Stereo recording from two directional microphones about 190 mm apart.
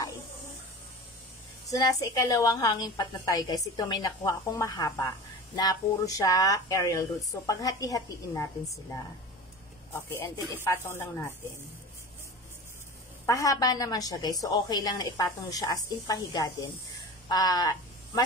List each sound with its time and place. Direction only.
1.7 s a woman's voice: 20° left (ahead or behind)
9.9 s speech: 10° left (ahead or behind)
13.2 s a woman's voice: 15° left (ahead or behind)